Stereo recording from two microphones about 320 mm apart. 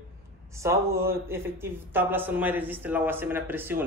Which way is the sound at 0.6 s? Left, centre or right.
Centre.